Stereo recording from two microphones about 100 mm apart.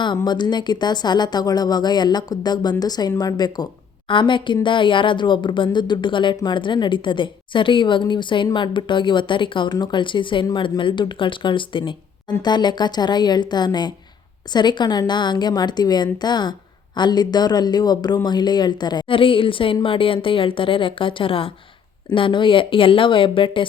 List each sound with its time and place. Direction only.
0.3 s a woman's voice: 45° left (ahead or behind)
4.1 s a woman's voice: 55° left (ahead or behind)